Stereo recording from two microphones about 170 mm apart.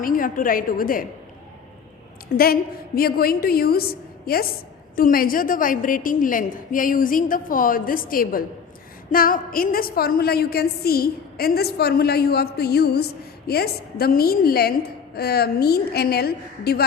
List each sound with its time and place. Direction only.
0.0 s a woman's voice: 55° left (ahead or behind)
2.3 s a woman's voice: 60° left (ahead or behind)